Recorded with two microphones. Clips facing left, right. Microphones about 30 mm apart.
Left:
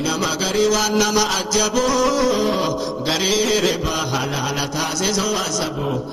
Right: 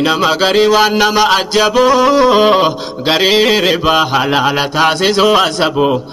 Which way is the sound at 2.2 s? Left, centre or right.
Right.